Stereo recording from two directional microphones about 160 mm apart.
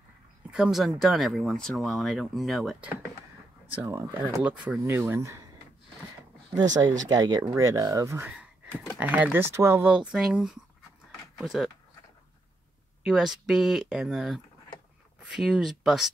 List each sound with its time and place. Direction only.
0.5 s speech: 5° right (ahead or behind)
3.7 s speech: 15° right (ahead or behind)
6.8 s speech: 20° right (ahead or behind); by 11.7 s centre (ahead or behind)
13.0 s speech: centre (ahead or behind)